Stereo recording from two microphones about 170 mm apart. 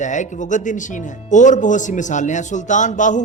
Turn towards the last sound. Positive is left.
turn(degrees=45)  # may be behind; listen again after turning